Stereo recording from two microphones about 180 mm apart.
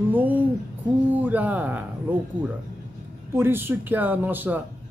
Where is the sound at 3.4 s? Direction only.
10° right (ahead or behind).